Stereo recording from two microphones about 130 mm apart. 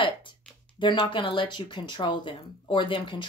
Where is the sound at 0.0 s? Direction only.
40° left (ahead or behind).